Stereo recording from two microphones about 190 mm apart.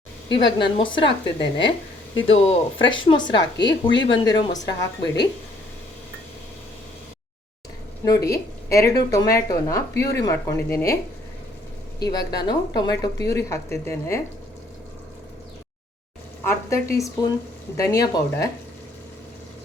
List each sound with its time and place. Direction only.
0.3 s a woman's voice: 25° left (ahead or behind)
2.1 s a woman's voice: 30° left (ahead or behind)
8.0 s speech: 15° left (ahead or behind)
12.0 s a woman's voice: 20° left (ahead or behind)
16.4 s speech: 15° left (ahead or behind)